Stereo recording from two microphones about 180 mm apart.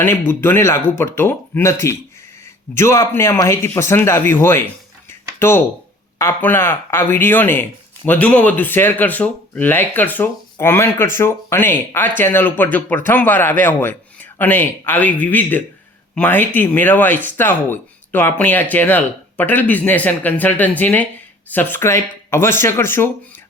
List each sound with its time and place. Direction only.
0.0 s speech: 10° left (ahead or behind)